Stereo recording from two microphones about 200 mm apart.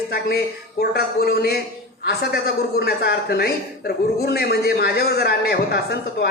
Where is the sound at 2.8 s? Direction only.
55° left (ahead or behind).